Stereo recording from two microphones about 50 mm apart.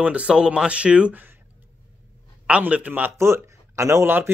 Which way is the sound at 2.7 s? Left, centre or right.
Right.